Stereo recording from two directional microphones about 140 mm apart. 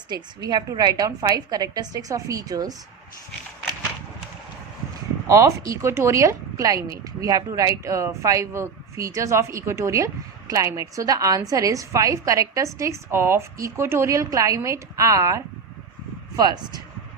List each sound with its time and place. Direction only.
0.1 s speech: 30° right (ahead or behind)
5.3 s speech: 20° right (ahead or behind)